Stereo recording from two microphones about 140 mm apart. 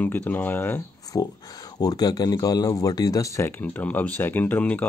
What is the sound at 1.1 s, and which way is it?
Speech, 25° left (ahead or behind).